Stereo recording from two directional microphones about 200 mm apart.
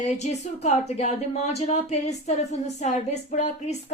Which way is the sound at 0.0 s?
35° left (ahead or behind).